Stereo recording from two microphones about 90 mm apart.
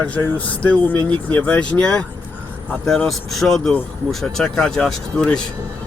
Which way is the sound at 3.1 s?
Centre (ahead or behind).